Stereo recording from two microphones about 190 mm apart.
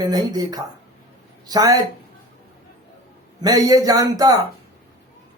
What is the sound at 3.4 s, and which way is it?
Speech, 20° right (ahead or behind).